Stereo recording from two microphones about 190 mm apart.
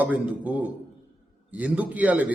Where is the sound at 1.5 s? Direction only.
10° right (ahead or behind).